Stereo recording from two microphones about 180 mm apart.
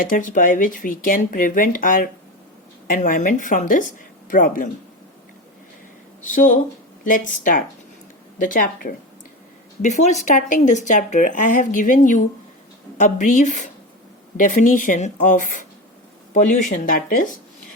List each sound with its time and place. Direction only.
0.0 s speech: 50° left (ahead or behind)
6.2 s speech: 45° left (ahead or behind)
9.8 s speech: 40° left (ahead or behind)